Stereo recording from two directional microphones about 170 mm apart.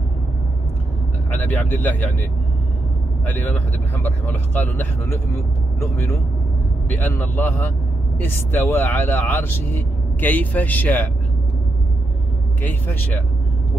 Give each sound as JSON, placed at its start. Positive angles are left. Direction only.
{"t": 1.3, "sound": "speech", "side_deg": 10}
{"t": 3.3, "sound": "speech", "side_deg": 10}
{"t": 12.8, "sound": "speech", "side_deg": 10}